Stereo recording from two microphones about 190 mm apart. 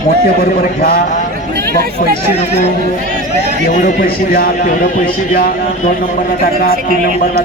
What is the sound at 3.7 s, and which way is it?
Speech, 45° left (ahead or behind).